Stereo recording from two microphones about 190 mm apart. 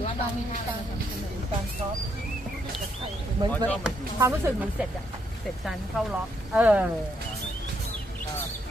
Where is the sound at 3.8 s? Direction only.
15° right (ahead or behind).